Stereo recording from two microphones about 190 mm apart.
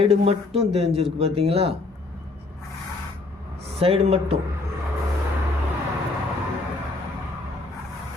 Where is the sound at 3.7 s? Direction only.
30° right (ahead or behind).